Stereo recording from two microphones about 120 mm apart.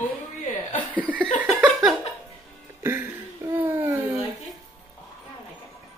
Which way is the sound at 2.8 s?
20° right (ahead or behind).